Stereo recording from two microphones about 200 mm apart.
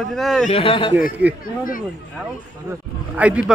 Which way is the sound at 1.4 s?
45° left (ahead or behind).